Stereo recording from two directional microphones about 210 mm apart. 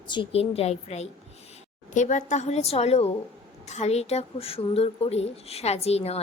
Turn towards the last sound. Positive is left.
turn(degrees=30)  # may be behind; listen again after turning